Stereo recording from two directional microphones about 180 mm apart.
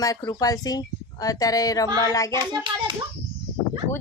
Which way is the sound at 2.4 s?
25° right (ahead or behind).